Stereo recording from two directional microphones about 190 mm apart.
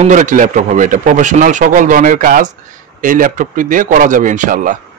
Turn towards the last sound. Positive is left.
turn(degrees=-45)  # may be behind; listen again after turning